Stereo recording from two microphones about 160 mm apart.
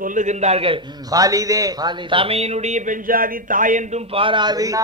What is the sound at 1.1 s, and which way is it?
A man's voice, 20° right (ahead or behind).